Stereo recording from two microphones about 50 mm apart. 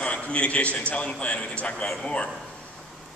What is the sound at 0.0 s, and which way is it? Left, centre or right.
A man's voice, left.